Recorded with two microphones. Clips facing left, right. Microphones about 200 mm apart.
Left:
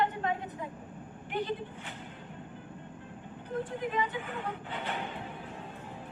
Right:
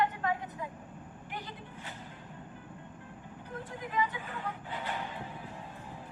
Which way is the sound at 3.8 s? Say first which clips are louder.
Left 2 dB; 25° left (ahead or behind).